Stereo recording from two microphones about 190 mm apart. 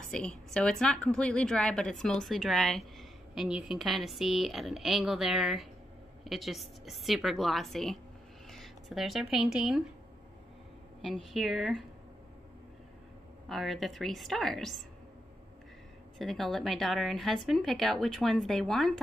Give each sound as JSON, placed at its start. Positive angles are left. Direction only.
{"t": 0.1, "sound": "a woman's voice", "side_deg": 5}
{"t": 11.0, "sound": "a woman's voice", "side_deg": 0}
{"t": 13.5, "sound": "a woman's voice", "side_deg": 0}
{"t": 16.2, "sound": "a woman's voice", "side_deg": 0}